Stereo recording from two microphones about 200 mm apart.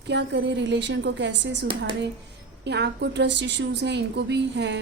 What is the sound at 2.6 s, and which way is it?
A woman's voice, 60° right (ahead or behind).